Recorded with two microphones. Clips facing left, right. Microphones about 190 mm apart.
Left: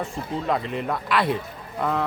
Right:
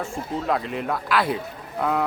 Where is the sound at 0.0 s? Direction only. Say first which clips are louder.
Even; centre (ahead or behind).